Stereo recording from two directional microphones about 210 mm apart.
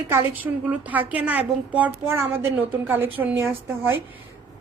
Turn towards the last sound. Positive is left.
turn(degrees=-10)  # may be behind; listen again after turning